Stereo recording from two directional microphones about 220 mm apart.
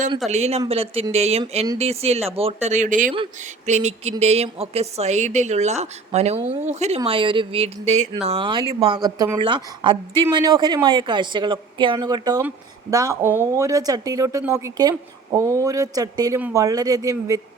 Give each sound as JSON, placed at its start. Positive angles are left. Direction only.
{"t": 0.3, "sound": "a woman's voice", "side_deg": -30}
{"t": 3.7, "sound": "a sound", "side_deg": -30}
{"t": 4.2, "sound": "a woman's voice", "side_deg": -30}